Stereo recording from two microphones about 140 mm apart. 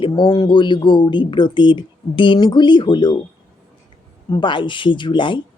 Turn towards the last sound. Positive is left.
turn(degrees=35)  # may be behind; listen again after turning